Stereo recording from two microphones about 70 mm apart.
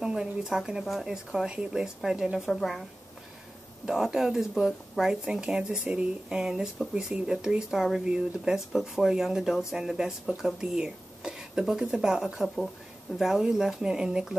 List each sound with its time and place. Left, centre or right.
0.0 s speech: centre
3.8 s speech: centre